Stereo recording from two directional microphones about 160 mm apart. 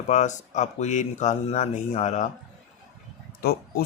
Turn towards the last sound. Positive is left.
turn(degrees=75)  # may be behind; listen again after turning